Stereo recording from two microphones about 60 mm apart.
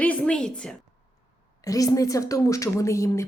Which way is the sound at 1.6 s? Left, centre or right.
Left.